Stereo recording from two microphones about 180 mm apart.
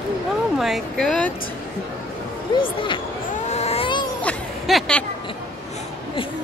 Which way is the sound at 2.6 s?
30° left (ahead or behind).